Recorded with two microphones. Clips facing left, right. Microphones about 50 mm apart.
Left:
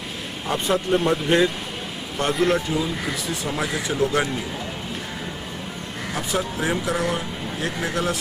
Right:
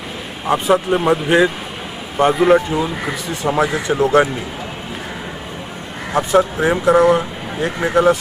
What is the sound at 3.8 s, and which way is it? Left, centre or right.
Speech, right.